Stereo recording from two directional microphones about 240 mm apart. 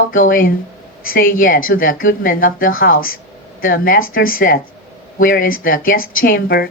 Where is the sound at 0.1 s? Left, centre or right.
Left.